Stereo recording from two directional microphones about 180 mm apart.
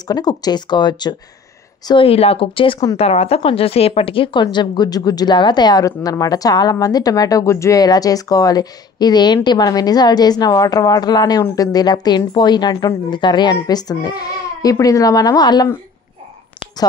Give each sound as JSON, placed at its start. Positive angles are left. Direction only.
{"t": 0.1, "sound": "a woman's voice", "side_deg": 20}